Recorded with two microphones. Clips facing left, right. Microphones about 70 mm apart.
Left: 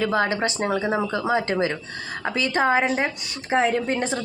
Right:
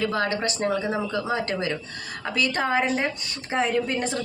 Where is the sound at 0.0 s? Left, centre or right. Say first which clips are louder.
Left 3 dB; left.